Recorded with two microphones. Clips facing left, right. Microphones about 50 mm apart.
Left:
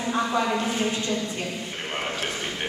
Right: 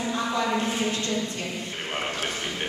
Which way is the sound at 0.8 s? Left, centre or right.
Centre.